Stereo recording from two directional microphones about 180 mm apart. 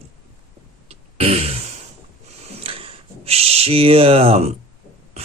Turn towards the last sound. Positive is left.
turn(degrees=-35)  # may be behind; listen again after turning